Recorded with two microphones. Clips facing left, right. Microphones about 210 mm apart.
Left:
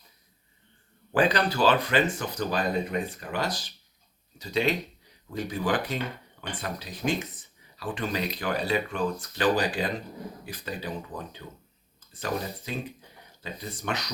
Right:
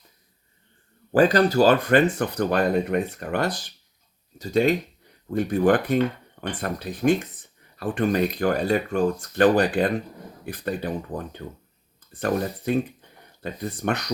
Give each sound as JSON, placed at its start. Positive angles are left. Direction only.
{"t": 1.1, "sound": "speech", "side_deg": -45}
{"t": 4.4, "sound": "speech", "side_deg": -45}